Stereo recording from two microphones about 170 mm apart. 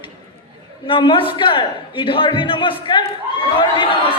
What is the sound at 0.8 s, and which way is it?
A man's voice, 30° left (ahead or behind).